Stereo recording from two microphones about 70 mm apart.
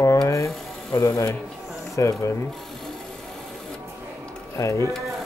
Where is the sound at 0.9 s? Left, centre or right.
Left.